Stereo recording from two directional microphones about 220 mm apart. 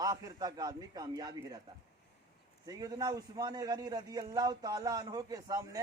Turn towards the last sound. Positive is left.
turn(degrees=-15)  # may be behind; listen again after turning